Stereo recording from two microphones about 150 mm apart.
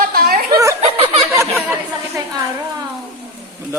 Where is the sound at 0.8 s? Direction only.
40° right (ahead or behind).